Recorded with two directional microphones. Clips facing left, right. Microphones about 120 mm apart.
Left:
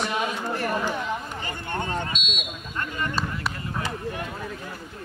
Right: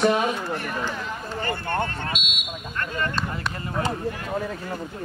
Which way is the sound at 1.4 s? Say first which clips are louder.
Right 7 dB; 50° right (ahead or behind).